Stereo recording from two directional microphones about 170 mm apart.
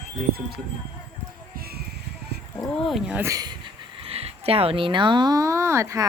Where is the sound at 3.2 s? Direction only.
20° right (ahead or behind).